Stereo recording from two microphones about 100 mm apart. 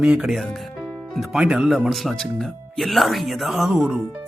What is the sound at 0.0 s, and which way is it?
Speech, 10° right (ahead or behind).